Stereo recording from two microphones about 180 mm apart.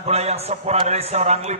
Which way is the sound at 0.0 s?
35° right (ahead or behind).